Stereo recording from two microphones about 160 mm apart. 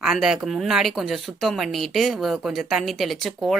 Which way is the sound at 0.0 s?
5° right (ahead or behind).